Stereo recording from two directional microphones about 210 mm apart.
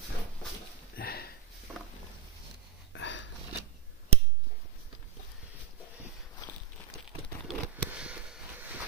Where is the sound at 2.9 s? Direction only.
60° left (ahead or behind).